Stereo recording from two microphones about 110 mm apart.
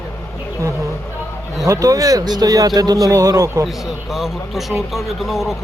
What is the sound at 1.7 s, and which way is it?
Speech, 30° right (ahead or behind).